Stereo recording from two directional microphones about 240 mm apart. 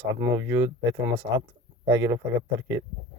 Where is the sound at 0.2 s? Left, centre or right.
Centre.